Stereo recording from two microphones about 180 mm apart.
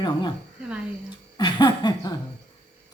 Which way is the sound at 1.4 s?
25° left (ahead or behind).